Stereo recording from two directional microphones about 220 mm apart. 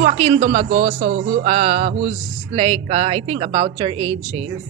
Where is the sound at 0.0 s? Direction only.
25° right (ahead or behind).